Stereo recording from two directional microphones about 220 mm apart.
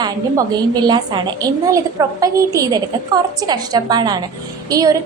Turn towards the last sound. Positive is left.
turn(degrees=-15)  # may be behind; listen again after turning